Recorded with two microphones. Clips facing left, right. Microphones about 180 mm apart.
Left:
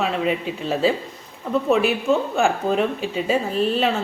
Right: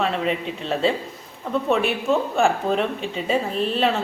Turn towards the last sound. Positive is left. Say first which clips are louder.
# left 1 dB
turn(degrees=0)  # may be behind; listen again after turning